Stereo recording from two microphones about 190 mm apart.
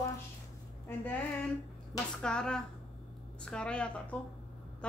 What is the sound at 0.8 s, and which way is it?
Speech, 10° left (ahead or behind).